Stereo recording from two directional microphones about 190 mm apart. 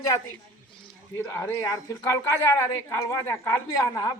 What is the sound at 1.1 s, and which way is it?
Speech, 15° left (ahead or behind).